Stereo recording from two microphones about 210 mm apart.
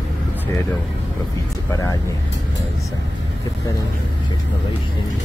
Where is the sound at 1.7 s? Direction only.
15° left (ahead or behind).